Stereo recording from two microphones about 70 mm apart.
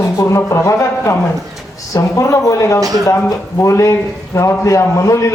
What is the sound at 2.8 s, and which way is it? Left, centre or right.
Speech, right.